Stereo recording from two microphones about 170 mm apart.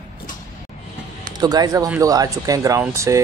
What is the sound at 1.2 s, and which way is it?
Speech, 25° right (ahead or behind).